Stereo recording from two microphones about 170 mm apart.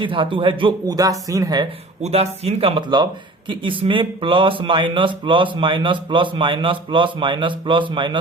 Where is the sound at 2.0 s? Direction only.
40° right (ahead or behind).